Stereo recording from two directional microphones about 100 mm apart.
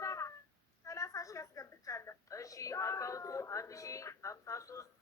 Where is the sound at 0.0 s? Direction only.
30° left (ahead or behind).